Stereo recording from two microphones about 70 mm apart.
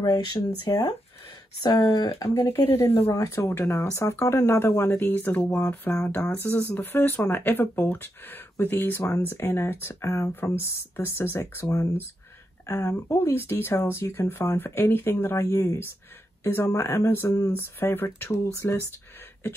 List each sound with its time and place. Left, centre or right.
0.0 s speech: left
1.6 s speech: left
2.2 s speech: left